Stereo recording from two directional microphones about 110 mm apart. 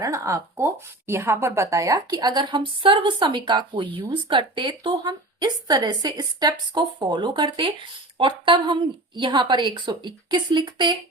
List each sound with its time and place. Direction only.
0.0 s speech: 30° right (ahead or behind)